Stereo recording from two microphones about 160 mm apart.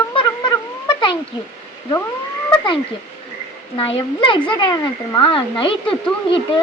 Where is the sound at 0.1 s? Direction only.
30° left (ahead or behind).